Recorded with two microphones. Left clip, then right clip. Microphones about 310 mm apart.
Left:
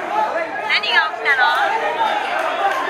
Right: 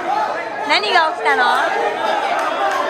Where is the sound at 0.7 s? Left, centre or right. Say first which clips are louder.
Right 3 dB; right.